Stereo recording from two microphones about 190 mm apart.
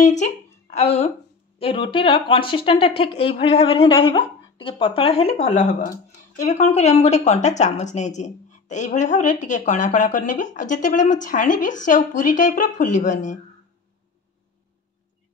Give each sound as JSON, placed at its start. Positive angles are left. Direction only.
{"t": 0.0, "sound": "a woman's voice", "side_deg": 40}